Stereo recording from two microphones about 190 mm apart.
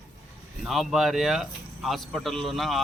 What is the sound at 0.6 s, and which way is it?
Speech, centre (ahead or behind).